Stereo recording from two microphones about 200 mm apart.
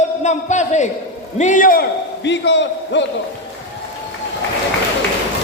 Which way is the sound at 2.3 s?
60° left (ahead or behind).